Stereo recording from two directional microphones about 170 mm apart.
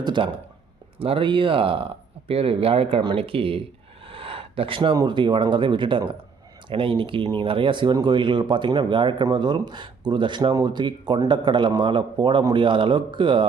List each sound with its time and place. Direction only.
0.0 s speech: 25° right (ahead or behind)